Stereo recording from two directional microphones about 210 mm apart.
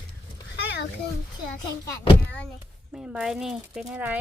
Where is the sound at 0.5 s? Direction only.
55° left (ahead or behind).